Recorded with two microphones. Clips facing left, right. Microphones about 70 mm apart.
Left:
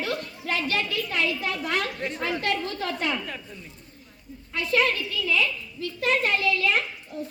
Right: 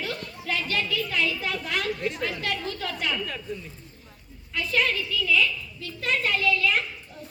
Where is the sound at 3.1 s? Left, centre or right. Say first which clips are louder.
Left 1 dB; left.